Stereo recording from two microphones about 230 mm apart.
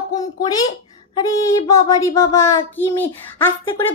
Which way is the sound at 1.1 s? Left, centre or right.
Centre.